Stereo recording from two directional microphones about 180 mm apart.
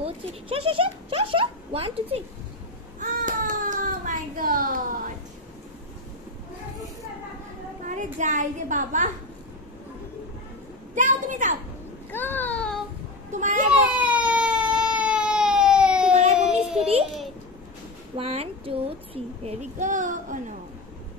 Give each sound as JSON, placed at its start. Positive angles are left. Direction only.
{"t": 0.0, "sound": "speech", "side_deg": -30}
{"t": 3.0, "sound": "baby cry", "side_deg": -45}
{"t": 7.8, "sound": "a woman's voice", "side_deg": -45}
{"t": 11.0, "sound": "a woman's voice", "side_deg": -45}
{"t": 12.1, "sound": "a sound", "side_deg": 10}
{"t": 13.3, "sound": "a woman's voice", "side_deg": -45}
{"t": 13.9, "sound": "baby cry", "side_deg": -5}
{"t": 16.3, "sound": "child singing", "side_deg": -5}
{"t": 18.1, "sound": "a child's voice", "side_deg": -35}